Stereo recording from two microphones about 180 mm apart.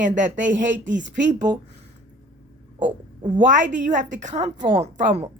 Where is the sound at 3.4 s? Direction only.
45° right (ahead or behind).